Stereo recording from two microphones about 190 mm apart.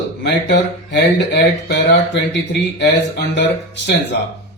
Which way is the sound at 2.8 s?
65° left (ahead or behind).